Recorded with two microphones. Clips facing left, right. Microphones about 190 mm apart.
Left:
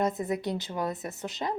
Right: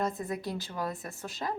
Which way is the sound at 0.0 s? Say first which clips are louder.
Left 4 dB; 20° left (ahead or behind).